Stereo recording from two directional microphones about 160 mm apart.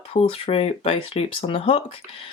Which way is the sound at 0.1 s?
35° left (ahead or behind).